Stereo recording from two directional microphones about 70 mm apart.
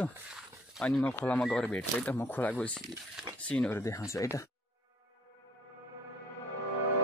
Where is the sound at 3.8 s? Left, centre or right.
Left.